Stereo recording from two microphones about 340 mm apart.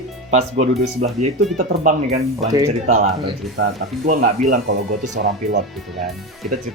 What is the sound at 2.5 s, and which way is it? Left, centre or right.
Speech, centre.